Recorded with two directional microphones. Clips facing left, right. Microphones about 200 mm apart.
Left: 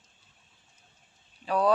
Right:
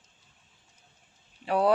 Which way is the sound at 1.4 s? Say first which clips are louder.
Right 1 dB; 25° right (ahead or behind).